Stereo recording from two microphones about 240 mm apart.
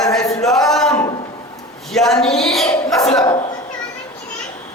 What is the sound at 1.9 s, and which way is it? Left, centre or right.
Speech, centre.